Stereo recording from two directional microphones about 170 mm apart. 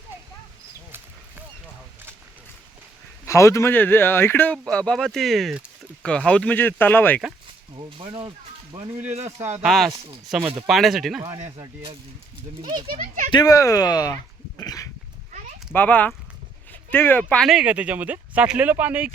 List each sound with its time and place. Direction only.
3.2 s speech: 15° left (ahead or behind)
7.8 s speech: 30° right (ahead or behind)
9.0 s speech: 40° right (ahead or behind)
9.6 s speech: centre (ahead or behind)
12.6 s speech: 30° right (ahead or behind)
13.3 s speech: 20° left (ahead or behind)
14.6 s a sound: 20° left (ahead or behind)
15.7 s speech: 10° left (ahead or behind); by 19.1 s 10° right (ahead or behind)